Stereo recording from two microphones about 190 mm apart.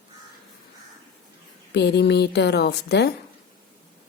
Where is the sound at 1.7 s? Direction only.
65° left (ahead or behind).